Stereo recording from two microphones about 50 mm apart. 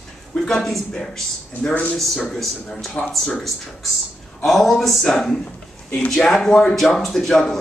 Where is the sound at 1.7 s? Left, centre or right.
Left.